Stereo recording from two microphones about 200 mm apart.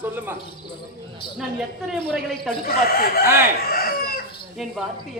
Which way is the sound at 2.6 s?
50° left (ahead or behind).